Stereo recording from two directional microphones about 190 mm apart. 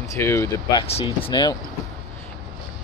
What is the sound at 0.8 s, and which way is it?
Speech, 30° left (ahead or behind).